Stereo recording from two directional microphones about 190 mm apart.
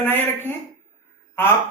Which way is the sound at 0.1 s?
10° left (ahead or behind).